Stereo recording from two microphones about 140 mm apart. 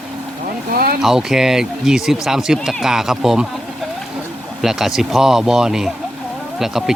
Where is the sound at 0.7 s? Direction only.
90° right.